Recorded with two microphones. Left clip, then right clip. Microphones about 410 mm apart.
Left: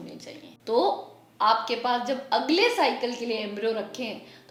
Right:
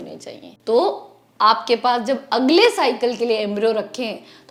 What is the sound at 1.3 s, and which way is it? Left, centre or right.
A woman's voice, right.